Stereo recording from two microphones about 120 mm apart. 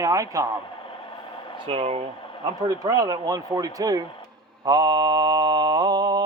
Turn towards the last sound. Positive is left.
turn(degrees=-35)  # may be behind; listen again after turning